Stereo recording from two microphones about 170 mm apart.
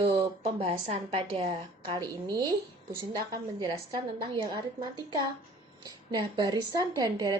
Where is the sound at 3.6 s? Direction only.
25° right (ahead or behind).